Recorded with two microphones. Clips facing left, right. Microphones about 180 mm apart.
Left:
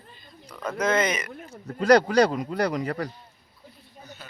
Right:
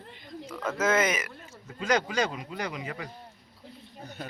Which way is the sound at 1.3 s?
40° left (ahead or behind).